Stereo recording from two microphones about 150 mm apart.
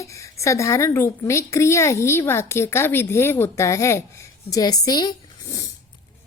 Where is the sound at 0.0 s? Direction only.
20° left (ahead or behind).